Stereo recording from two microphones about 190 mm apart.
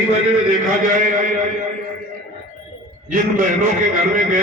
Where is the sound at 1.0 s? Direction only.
45° right (ahead or behind).